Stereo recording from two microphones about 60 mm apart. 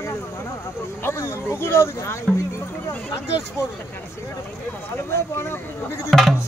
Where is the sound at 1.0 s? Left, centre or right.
Left.